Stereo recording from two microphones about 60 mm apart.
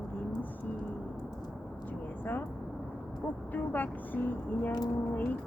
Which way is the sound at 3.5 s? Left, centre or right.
Left.